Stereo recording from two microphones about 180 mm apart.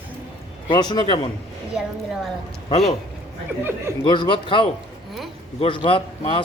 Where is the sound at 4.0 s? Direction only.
25° left (ahead or behind).